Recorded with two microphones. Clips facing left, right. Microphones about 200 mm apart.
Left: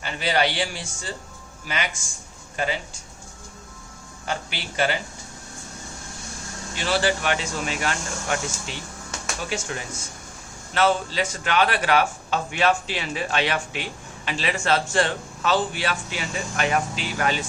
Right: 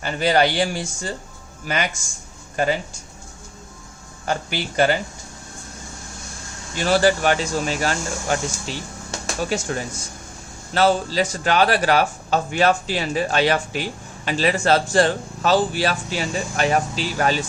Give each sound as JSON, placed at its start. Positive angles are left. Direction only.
{"t": 0.0, "sound": "speech", "side_deg": -45}
{"t": 4.3, "sound": "speech", "side_deg": -45}
{"t": 6.7, "sound": "speech", "side_deg": -45}